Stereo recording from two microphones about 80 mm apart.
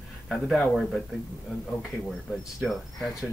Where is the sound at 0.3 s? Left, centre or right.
Centre.